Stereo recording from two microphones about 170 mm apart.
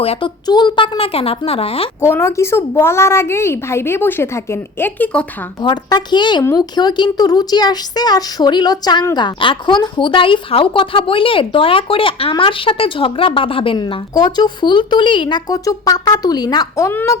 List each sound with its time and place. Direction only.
0.0 s a woman's voice: 35° left (ahead or behind)
0.4 s a woman's voice: 25° left (ahead or behind)
2.0 s a woman's voice: 15° left (ahead or behind)
5.6 s speech: 25° left (ahead or behind)